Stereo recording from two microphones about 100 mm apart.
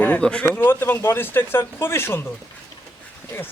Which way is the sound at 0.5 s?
20° left (ahead or behind).